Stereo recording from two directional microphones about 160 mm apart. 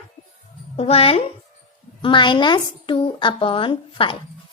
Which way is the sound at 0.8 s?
40° left (ahead or behind).